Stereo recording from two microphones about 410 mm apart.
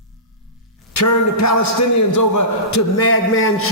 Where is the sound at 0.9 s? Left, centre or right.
Left.